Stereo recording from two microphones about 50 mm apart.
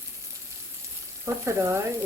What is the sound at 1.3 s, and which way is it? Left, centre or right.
Frying, right.